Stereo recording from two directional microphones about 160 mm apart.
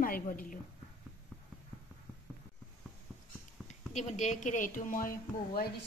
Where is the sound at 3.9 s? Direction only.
45° left (ahead or behind); by 5.7 s 65° left (ahead or behind).